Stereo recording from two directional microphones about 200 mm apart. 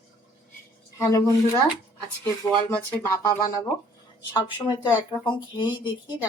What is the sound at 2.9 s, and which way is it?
Speech, 15° left (ahead or behind).